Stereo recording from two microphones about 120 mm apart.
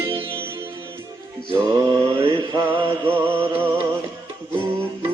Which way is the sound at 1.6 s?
35° right (ahead or behind).